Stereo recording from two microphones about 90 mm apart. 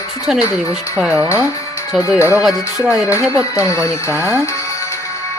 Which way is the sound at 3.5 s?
35° left (ahead or behind).